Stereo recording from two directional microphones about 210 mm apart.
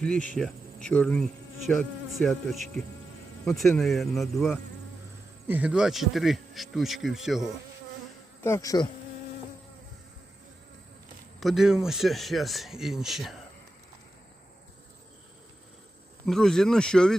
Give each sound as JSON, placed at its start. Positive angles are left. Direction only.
{"t": 0.9, "sound": "speech", "side_deg": 5}
{"t": 8.4, "sound": "insect", "side_deg": 15}
{"t": 11.3, "sound": "speech", "side_deg": 0}
{"t": 16.2, "sound": "speech", "side_deg": 0}